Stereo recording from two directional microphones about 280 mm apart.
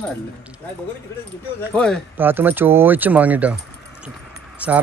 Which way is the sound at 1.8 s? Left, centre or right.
Centre.